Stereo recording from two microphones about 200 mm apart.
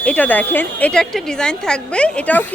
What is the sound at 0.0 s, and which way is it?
Speech, 5° left (ahead or behind).